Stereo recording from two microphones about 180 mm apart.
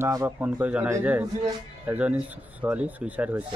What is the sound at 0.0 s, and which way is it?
Speech, 15° right (ahead or behind).